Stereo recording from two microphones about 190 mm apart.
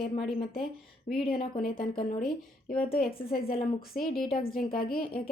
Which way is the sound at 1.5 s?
50° left (ahead or behind).